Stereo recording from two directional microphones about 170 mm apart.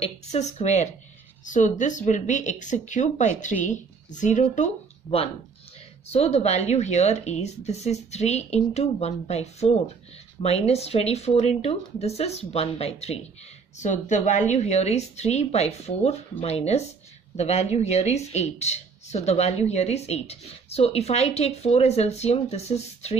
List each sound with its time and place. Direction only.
0.0 s speech: 40° left (ahead or behind)
6.0 s speech: 40° left (ahead or behind)